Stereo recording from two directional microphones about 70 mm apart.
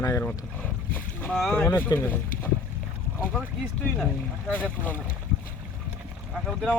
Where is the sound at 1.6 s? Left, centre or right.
Left.